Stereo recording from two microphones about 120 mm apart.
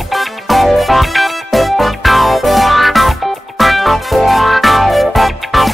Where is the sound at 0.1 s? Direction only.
Centre (ahead or behind).